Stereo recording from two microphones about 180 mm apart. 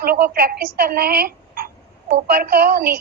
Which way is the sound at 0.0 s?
55° right (ahead or behind).